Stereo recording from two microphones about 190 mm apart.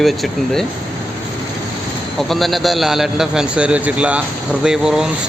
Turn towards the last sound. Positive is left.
turn(degrees=-5)  # may be behind; listen again after turning